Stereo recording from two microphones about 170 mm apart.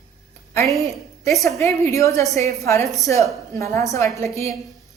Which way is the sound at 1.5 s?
15° left (ahead or behind).